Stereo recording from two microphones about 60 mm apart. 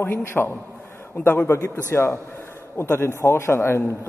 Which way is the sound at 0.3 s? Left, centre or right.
Left.